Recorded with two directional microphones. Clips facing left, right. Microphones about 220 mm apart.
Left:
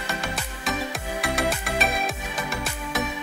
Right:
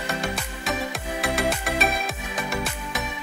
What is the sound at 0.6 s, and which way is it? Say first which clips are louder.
Music: even; centre (ahead or behind).